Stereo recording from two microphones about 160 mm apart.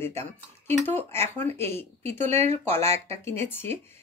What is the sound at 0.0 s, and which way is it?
Speech, 15° left (ahead or behind).